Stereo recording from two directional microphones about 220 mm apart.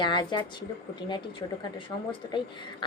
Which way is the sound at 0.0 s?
20° left (ahead or behind).